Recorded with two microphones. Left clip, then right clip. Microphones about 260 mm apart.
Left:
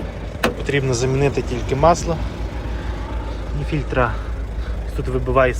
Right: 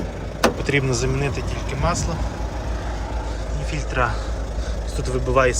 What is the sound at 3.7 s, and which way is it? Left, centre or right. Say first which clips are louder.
Speech: left 3 dB; centre.